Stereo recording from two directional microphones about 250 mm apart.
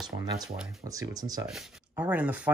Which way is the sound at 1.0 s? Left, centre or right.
Centre.